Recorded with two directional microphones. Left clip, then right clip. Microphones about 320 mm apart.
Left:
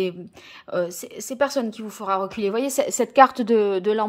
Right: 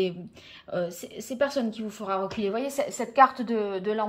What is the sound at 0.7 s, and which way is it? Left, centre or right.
A woman's voice, centre.